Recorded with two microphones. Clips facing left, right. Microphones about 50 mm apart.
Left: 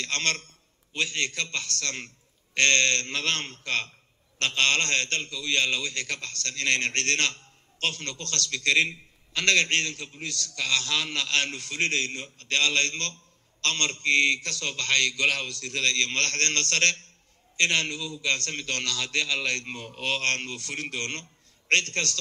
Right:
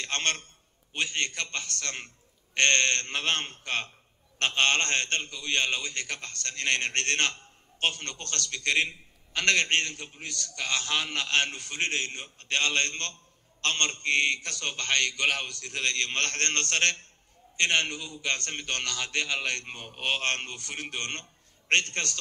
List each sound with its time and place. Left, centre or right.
0.0 s a man's voice: right